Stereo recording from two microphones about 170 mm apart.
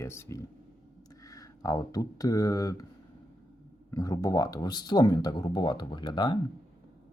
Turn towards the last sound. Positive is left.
turn(degrees=25)  # may be behind; listen again after turning